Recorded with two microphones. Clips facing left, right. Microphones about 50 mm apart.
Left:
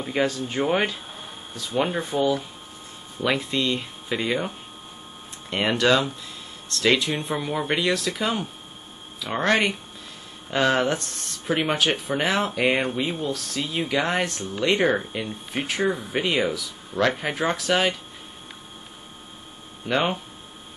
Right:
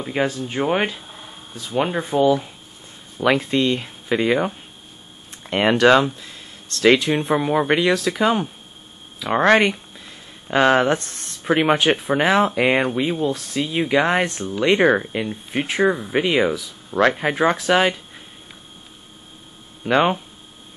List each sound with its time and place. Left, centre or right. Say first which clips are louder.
0.0 s speech: right 2 dB; centre
5.5 s speech: right 6 dB; right
10.5 s speech: right 5 dB; right
12.2 s speech: right 5 dB; centre
19.9 s speech: right 6 dB; centre